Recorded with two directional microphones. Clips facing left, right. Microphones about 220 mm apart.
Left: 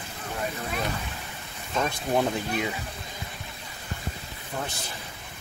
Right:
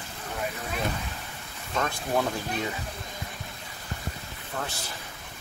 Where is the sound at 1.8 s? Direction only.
15° left (ahead or behind).